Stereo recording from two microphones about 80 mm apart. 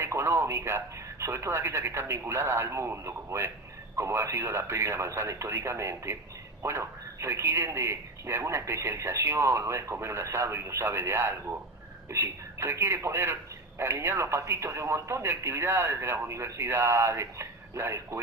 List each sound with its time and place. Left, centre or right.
0.0 s speech: right